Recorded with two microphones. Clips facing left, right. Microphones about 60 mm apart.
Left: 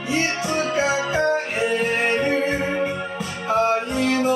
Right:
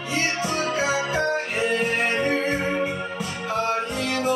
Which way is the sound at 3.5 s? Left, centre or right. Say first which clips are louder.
Left 5 dB; left.